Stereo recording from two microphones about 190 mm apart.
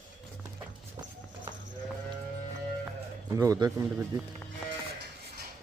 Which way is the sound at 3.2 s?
15° right (ahead or behind).